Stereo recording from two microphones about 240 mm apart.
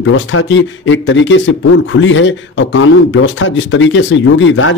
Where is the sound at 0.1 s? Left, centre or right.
Left.